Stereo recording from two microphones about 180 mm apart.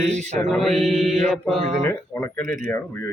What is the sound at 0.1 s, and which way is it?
Mantra, 40° right (ahead or behind).